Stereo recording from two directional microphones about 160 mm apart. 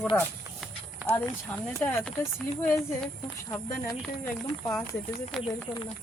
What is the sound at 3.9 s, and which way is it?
Speech, 5° left (ahead or behind).